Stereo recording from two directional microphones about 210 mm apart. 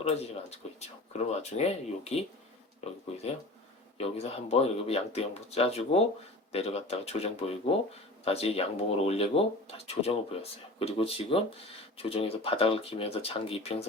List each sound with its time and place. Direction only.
0.0 s speech: 30° left (ahead or behind)